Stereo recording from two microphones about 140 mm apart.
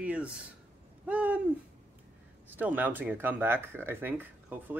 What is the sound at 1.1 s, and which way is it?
Owl, 10° right (ahead or behind).